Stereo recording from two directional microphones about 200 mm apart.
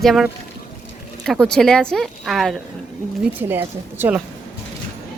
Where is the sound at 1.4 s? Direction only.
5° left (ahead or behind).